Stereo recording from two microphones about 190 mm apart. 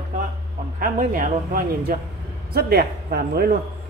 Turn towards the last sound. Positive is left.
turn(degrees=-55)  # may be behind; listen again after turning